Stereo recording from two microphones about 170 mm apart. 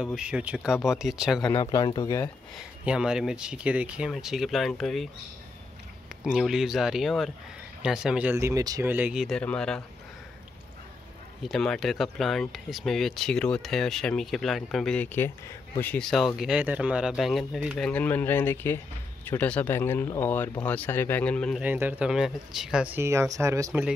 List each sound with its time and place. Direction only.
0.0 s speech: 5° right (ahead or behind)
1.4 s speech: 20° left (ahead or behind)
2.8 s speech: 5° right (ahead or behind)
6.2 s speech: 5° right (ahead or behind)
11.4 s speech: 5° left (ahead or behind)
21.5 s speech: 10° right (ahead or behind)